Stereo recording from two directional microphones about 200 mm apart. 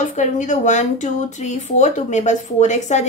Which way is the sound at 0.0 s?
40° left (ahead or behind).